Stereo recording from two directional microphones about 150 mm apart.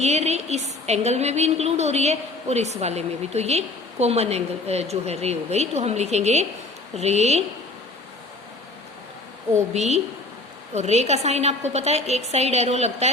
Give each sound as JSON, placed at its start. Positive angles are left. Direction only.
{"t": 0.0, "sound": "a woman's voice", "side_deg": -45}
{"t": 9.7, "sound": "a woman's voice", "side_deg": -45}